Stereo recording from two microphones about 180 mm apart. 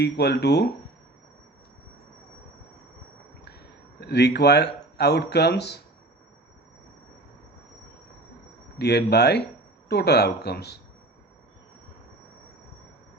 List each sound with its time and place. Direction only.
0.0 s speech: 70° left (ahead or behind)
4.0 s speech: 65° left (ahead or behind)
8.8 s speech: 65° left (ahead or behind)